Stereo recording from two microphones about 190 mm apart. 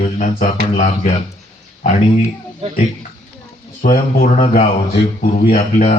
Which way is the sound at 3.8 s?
40° left (ahead or behind).